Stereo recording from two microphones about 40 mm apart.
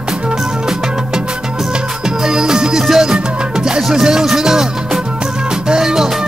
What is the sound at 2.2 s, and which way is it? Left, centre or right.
Music, centre.